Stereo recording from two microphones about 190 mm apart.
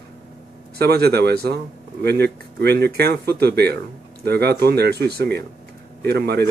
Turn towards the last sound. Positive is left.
turn(degrees=-60)  # may be behind; listen again after turning